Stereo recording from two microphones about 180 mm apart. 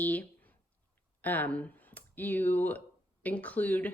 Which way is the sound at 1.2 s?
10° left (ahead or behind).